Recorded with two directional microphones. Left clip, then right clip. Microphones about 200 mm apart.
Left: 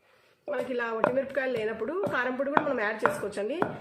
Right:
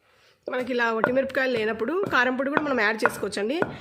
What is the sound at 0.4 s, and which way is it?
A woman's voice, 60° right (ahead or behind).